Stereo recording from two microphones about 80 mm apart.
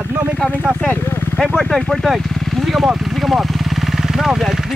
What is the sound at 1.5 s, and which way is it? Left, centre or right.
Speech, centre.